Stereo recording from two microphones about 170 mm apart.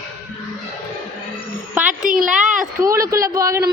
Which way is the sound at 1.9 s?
50° right (ahead or behind).